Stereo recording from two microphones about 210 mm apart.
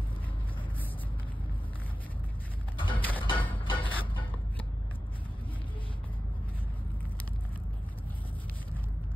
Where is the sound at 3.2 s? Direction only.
25° left (ahead or behind).